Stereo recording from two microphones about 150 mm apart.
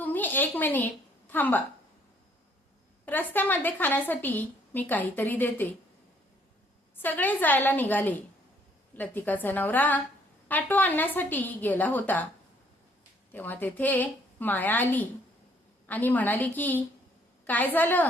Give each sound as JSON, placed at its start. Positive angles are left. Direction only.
{"t": 0.0, "sound": "a sound", "side_deg": 10}
{"t": 1.3, "sound": "a woman's voice", "side_deg": 10}
{"t": 3.1, "sound": "a woman's voice", "side_deg": 10}
{"t": 7.0, "sound": "a woman's voice", "side_deg": 10}
{"t": 13.3, "sound": "a woman's voice", "side_deg": 10}